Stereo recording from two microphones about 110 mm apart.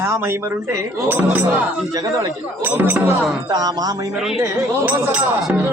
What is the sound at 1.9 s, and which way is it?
Speech, 35° right (ahead or behind).